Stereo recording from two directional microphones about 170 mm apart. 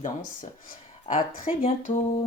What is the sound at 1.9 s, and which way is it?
Speech, 35° left (ahead or behind).